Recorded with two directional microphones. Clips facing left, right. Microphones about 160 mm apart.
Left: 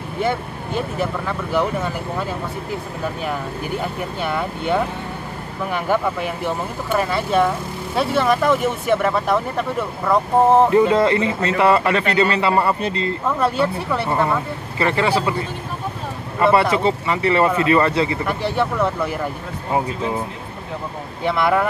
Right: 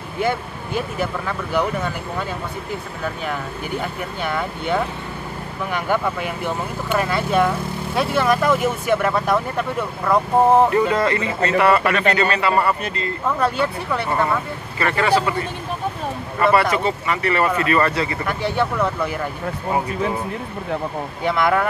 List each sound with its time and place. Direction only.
0.7 s speech: centre (ahead or behind)
4.2 s speech: centre (ahead or behind)
10.9 s speech: 25° left (ahead or behind)
13.4 s speech: 5° left (ahead or behind)
14.8 s speech: 25° left (ahead or behind)
16.3 s speech: 25° left (ahead or behind)
18.2 s speech: centre (ahead or behind)
21.2 s speech: centre (ahead or behind)